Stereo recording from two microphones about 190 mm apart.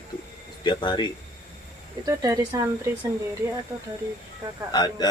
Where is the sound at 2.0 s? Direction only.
20° right (ahead or behind).